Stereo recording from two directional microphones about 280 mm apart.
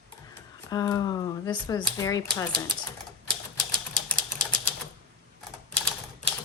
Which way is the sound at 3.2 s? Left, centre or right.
Centre.